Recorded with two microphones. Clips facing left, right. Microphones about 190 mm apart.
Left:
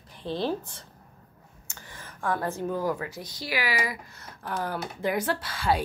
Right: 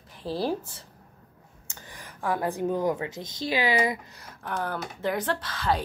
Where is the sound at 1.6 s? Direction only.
15° right (ahead or behind).